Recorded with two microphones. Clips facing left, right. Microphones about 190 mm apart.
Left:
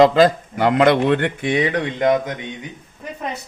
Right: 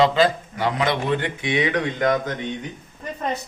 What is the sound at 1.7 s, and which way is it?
Speech, 25° left (ahead or behind).